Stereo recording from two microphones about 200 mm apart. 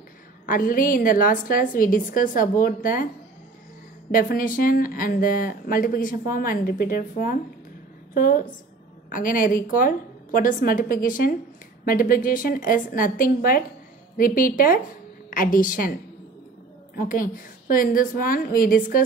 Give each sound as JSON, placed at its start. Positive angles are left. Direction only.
{"t": 0.5, "sound": "speech", "side_deg": 45}
{"t": 4.1, "sound": "a woman's voice", "side_deg": 45}